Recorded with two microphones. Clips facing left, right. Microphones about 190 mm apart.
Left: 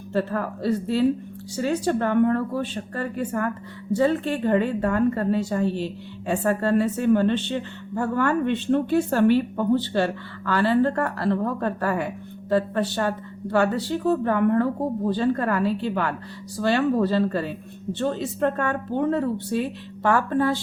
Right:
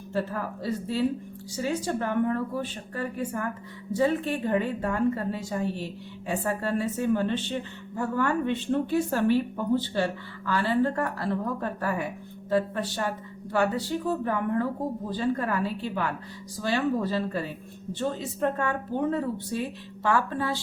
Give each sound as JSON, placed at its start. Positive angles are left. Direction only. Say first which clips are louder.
{"t": 0.1, "sound": "a woman's voice", "louder": "left 5 dB", "side_deg": 70}